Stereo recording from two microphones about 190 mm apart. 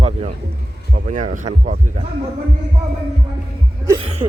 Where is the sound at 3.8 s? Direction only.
25° right (ahead or behind).